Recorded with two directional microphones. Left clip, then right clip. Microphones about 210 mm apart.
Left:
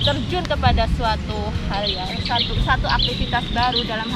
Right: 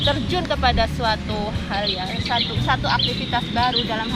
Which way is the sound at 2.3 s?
20° right (ahead or behind).